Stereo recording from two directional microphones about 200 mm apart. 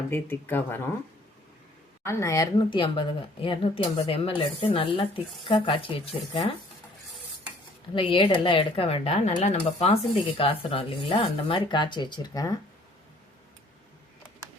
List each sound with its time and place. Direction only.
0.1 s speech: 10° left (ahead or behind)
2.0 s speech: 15° left (ahead or behind)
8.1 s speech: 25° left (ahead or behind)